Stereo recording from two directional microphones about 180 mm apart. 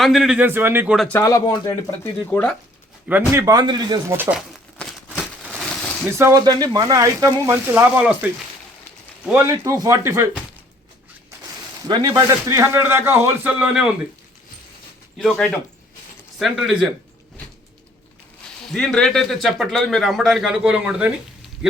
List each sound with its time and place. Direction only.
0.0 s speech: centre (ahead or behind)
0.9 s speech: 10° left (ahead or behind)
2.2 s speech: 10° left (ahead or behind)
3.1 s speech: 10° right (ahead or behind)
4.2 s speech: 5° right (ahead or behind)
5.0 s a sound: 5° right (ahead or behind)
6.1 s speech: 15° right (ahead or behind)
9.5 s speech: 20° right (ahead or behind)
11.9 s speech: 25° right (ahead or behind); by 13.9 s 5° right (ahead or behind)
15.2 s a man's voice: 5° left (ahead or behind)
18.6 s a man's voice: centre (ahead or behind)